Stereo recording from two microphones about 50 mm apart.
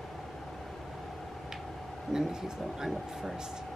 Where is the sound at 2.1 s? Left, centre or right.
Centre.